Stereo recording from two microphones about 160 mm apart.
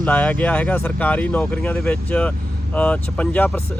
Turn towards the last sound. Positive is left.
turn(degrees=10)  # may be behind; listen again after turning